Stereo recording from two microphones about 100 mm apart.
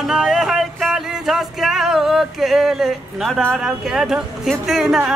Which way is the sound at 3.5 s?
5° right (ahead or behind).